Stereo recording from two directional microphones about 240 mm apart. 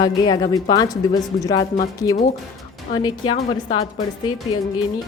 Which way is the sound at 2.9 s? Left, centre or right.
Centre.